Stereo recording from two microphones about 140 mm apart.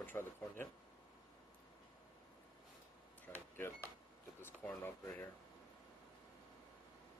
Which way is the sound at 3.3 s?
15° left (ahead or behind).